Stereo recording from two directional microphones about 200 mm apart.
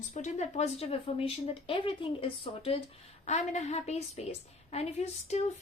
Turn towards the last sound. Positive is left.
turn(degrees=30)  # may be behind; listen again after turning